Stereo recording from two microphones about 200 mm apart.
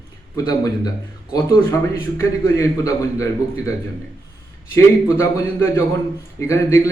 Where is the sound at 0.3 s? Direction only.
20° left (ahead or behind).